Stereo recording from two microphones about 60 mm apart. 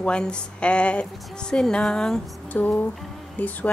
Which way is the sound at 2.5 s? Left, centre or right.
Left.